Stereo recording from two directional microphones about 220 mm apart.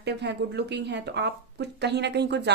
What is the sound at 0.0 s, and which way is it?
Speech, 50° right (ahead or behind).